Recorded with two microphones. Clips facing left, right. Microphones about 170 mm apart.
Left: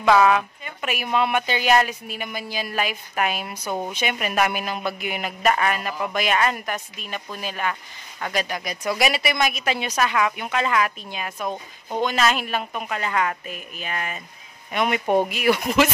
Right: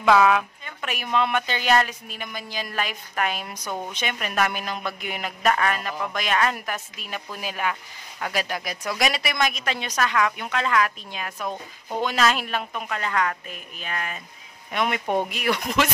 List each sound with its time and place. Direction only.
0.0 s a woman's voice: centre (ahead or behind)
3.6 s speech: 20° left (ahead or behind)
3.9 s a man's voice: 10° left (ahead or behind)